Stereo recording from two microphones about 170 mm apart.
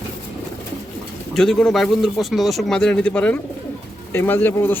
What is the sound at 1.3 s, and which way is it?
Speech, centre (ahead or behind).